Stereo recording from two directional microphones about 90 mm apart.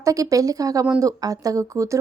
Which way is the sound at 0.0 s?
40° right (ahead or behind).